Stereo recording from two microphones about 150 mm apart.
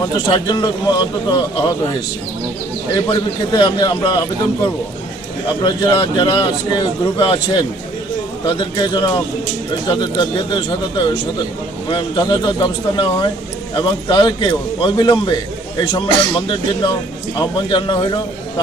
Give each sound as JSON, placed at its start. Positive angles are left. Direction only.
{"t": 0.0, "sound": "speech", "side_deg": 30}
{"t": 3.1, "sound": "speech", "side_deg": 30}
{"t": 5.6, "sound": "a man's voice", "side_deg": 30}